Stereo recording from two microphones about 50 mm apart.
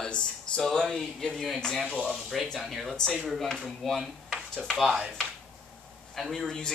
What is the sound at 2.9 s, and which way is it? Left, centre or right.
Speech, centre.